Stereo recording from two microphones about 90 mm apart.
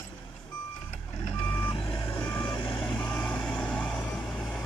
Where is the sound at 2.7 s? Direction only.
10° left (ahead or behind).